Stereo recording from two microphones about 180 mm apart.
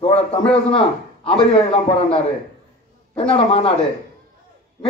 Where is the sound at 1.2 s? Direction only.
30° left (ahead or behind).